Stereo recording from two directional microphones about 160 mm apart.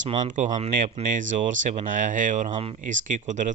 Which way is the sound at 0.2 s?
50° right (ahead or behind).